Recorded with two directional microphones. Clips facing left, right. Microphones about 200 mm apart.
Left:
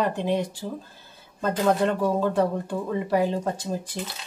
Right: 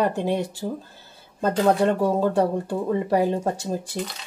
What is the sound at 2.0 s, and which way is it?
Speech, 30° right (ahead or behind).